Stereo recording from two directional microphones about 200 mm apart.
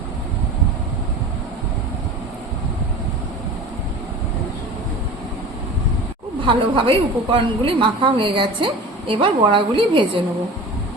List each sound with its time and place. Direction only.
6.4 s a woman's voice: 25° right (ahead or behind)